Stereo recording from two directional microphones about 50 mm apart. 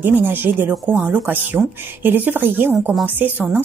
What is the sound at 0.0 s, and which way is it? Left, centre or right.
A woman's voice, right.